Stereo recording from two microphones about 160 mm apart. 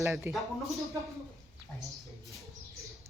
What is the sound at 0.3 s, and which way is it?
Speech, 15° right (ahead or behind).